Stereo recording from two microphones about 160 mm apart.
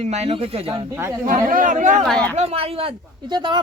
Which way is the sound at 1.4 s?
55° right (ahead or behind).